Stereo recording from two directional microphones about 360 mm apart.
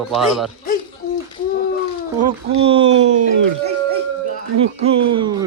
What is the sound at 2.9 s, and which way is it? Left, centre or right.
Speech, right.